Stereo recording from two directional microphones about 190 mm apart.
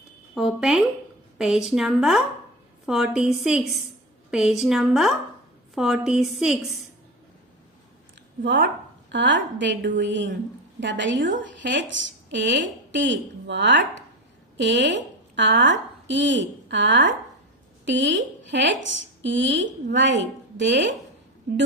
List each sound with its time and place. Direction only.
0.3 s a woman's voice: centre (ahead or behind)
8.4 s a woman's voice: 55° right (ahead or behind); by 20.9 s 70° right (ahead or behind)